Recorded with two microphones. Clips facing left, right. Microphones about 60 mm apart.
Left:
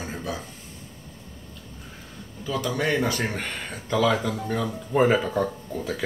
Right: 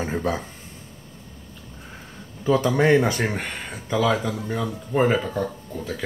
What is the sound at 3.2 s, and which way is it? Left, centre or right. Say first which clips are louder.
Speech: right 2 dB; centre.